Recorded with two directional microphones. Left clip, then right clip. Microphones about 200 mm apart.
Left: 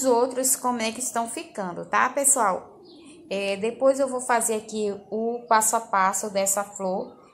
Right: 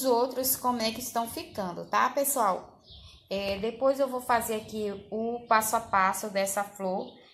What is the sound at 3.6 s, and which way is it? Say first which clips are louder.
Speech: left 5 dB; 10° left (ahead or behind).